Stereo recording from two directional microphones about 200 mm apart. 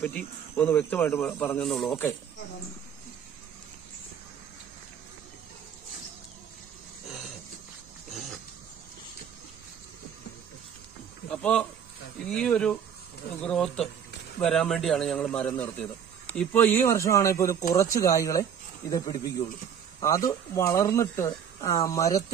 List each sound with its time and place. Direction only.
0.0 s speech: 5° left (ahead or behind)
11.2 s a man's voice: 5° left (ahead or behind)